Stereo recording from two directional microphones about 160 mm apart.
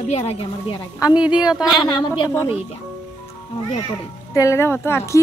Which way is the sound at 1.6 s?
30° left (ahead or behind).